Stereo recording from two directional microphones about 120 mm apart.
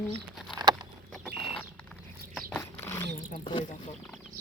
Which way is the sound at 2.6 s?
25° left (ahead or behind).